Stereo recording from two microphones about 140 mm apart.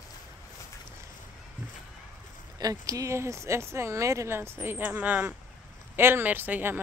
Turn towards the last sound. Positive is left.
turn(degrees=-15)  # may be behind; listen again after turning